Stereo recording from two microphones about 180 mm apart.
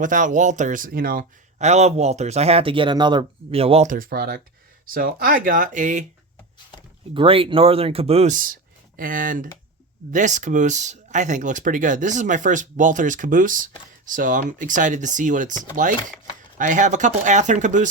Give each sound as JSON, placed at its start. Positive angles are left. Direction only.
{"t": 0.0, "sound": "a man's voice", "side_deg": -45}
{"t": 3.9, "sound": "speech", "side_deg": -55}
{"t": 7.1, "sound": "a man's voice", "side_deg": -30}